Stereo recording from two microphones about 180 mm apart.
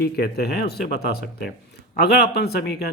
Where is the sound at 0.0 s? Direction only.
60° left (ahead or behind).